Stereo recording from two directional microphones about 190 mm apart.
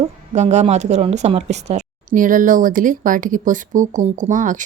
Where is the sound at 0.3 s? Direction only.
35° right (ahead or behind).